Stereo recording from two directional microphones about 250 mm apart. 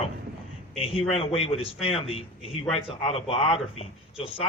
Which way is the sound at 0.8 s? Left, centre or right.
Left.